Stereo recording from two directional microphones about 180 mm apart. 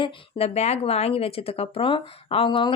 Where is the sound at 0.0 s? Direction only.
35° left (ahead or behind).